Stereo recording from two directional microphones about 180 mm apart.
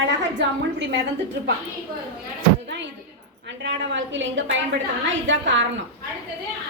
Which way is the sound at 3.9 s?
90° right.